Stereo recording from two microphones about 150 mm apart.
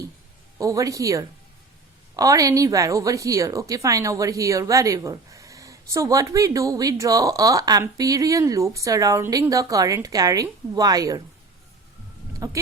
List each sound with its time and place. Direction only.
0.6 s a woman's voice: 20° right (ahead or behind)
12.4 s a woman's voice: 25° right (ahead or behind)